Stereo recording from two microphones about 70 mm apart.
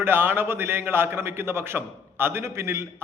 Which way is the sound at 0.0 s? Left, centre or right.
Right.